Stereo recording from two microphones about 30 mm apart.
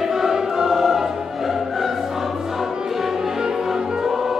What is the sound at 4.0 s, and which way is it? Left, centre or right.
Music, centre.